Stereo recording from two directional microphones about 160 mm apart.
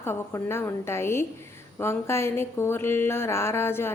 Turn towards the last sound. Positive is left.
turn(degrees=15)  # may be behind; listen again after turning